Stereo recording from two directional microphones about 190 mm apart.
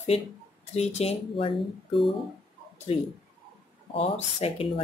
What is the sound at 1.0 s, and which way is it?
Speech, 30° left (ahead or behind).